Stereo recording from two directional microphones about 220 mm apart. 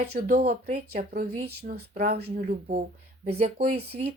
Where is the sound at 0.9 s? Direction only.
40° right (ahead or behind).